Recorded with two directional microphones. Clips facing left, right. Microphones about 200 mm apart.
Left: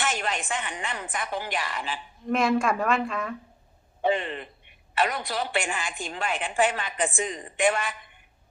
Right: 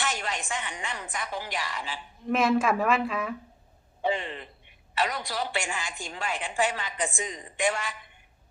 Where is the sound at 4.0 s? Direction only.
55° left (ahead or behind).